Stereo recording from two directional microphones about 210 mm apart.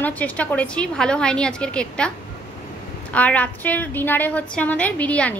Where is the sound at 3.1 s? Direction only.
5° left (ahead or behind).